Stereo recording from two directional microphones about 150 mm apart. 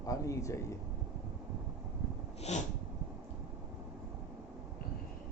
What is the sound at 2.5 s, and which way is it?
Sneeze, 50° left (ahead or behind).